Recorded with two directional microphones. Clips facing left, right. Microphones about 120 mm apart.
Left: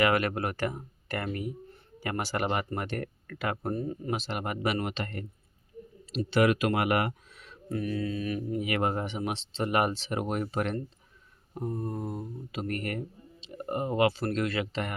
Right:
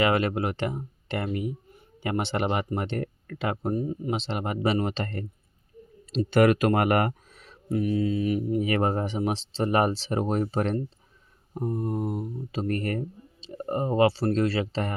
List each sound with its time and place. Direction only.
0.0 s speech: 25° right (ahead or behind)
4.2 s speech: 25° right (ahead or behind)
6.3 s speech: 45° right (ahead or behind)
7.7 s speech: 20° right (ahead or behind)
8.6 s speech: 35° right (ahead or behind)
11.5 s mantra: 15° right (ahead or behind)
12.5 s speech: 35° right (ahead or behind)